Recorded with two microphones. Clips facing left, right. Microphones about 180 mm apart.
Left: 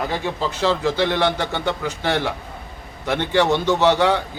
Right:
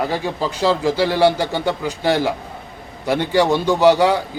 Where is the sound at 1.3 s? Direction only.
35° right (ahead or behind).